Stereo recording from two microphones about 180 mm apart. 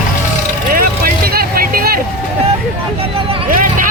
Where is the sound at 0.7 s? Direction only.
55° right (ahead or behind).